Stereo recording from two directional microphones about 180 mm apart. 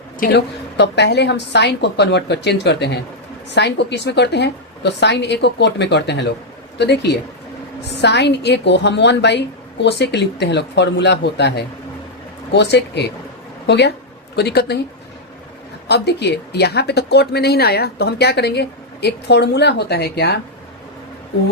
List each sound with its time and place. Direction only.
0.2 s a woman's voice: 65° left (ahead or behind)
15.9 s speech: 65° left (ahead or behind)